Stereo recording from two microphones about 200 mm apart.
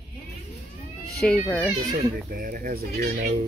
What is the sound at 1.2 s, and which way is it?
Speech, 5° left (ahead or behind).